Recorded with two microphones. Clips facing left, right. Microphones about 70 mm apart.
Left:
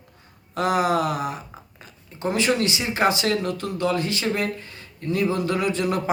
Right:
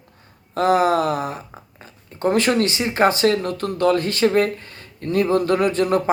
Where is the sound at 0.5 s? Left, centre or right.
Right.